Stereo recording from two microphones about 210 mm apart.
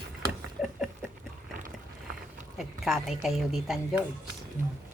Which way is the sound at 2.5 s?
Centre (ahead or behind).